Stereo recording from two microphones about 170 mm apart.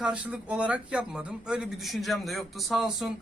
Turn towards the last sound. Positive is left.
turn(degrees=0)  # may be behind; listen again after turning